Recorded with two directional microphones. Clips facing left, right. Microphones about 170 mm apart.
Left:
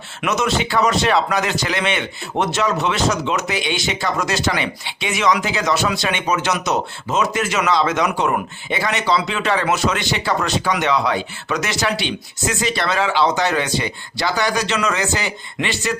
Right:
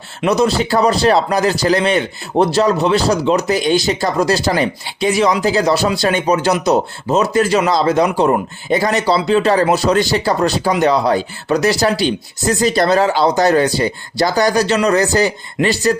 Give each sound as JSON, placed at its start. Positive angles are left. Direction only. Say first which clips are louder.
{"t": 0.2, "sound": "speech", "louder": "right 6 dB", "side_deg": -35}